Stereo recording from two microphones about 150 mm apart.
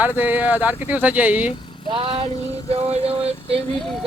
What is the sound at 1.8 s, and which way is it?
Speech, 35° right (ahead or behind).